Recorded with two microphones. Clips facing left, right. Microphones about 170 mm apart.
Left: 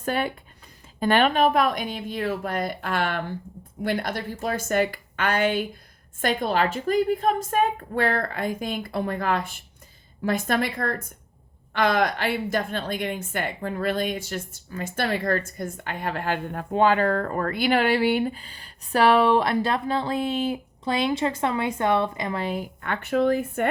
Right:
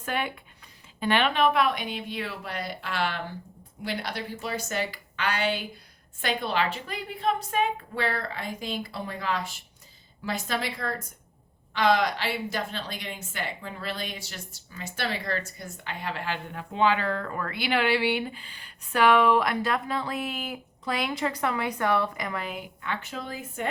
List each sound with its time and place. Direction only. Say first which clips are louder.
0.0 s a woman's voice: left 5 dB; 40° left (ahead or behind)
22.8 s speech: left 13 dB; 55° left (ahead or behind)